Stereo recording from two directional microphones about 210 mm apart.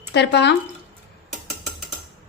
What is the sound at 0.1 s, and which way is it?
Speech, 55° left (ahead or behind).